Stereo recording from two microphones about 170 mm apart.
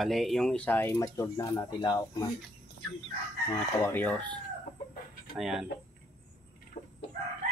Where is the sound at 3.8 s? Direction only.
10° left (ahead or behind).